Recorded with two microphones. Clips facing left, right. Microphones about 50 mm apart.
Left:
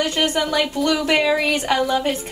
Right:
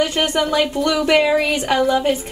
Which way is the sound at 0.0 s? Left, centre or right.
Right.